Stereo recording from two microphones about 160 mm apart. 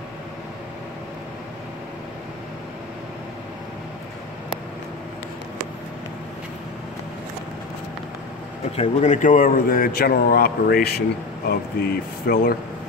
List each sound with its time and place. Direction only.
8.7 s speech: 50° left (ahead or behind); by 12.5 s 70° left (ahead or behind)